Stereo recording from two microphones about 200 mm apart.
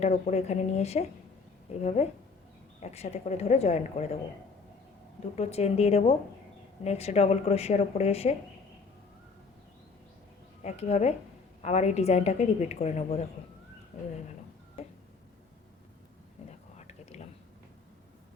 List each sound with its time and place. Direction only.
0.0 s a woman's voice: 35° left (ahead or behind)
5.4 s a woman's voice: 30° left (ahead or behind)
10.6 s a woman's voice: 35° left (ahead or behind)
16.5 s whispering: 35° left (ahead or behind)